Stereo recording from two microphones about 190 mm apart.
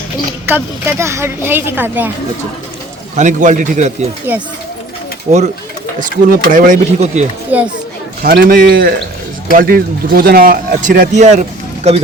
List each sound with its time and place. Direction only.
0.4 s a woman's voice: 10° right (ahead or behind)
3.2 s a man's voice: 40° right (ahead or behind)
4.3 s a woman's voice: 10° right (ahead or behind)
5.3 s a man's voice: 40° right (ahead or behind)
7.5 s a woman's voice: 10° right (ahead or behind)
8.2 s speech: 50° right (ahead or behind); by 12.0 s 35° right (ahead or behind)